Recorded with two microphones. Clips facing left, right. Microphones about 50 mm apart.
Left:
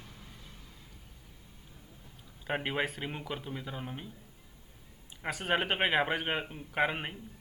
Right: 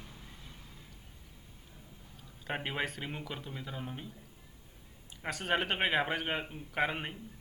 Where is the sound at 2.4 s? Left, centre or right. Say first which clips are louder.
Left 3 dB; centre.